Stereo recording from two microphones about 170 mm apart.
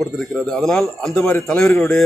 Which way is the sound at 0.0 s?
Centre (ahead or behind).